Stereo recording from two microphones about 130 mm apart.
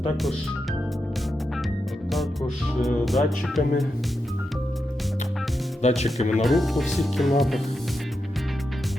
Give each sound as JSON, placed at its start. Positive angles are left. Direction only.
{"t": 2.8, "sound": "speech", "side_deg": 0}
{"t": 5.8, "sound": "speech", "side_deg": 55}
{"t": 6.3, "sound": "speech", "side_deg": 0}